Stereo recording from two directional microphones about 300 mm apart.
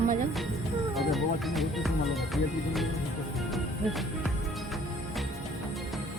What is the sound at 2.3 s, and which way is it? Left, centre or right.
Music, centre.